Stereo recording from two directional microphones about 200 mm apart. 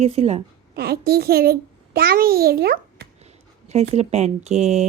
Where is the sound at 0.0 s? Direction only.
30° right (ahead or behind).